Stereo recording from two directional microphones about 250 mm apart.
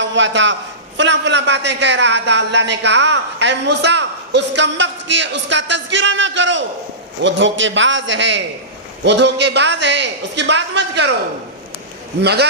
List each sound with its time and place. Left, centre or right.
0.0 s a man's voice: right
12.2 s a man's voice: right